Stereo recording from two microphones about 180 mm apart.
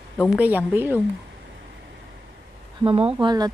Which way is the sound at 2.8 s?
30° right (ahead or behind).